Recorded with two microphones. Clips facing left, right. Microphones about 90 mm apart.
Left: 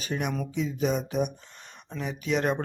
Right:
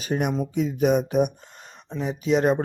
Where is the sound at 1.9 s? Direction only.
30° right (ahead or behind).